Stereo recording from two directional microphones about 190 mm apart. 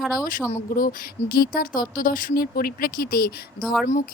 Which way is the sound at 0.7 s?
50° left (ahead or behind).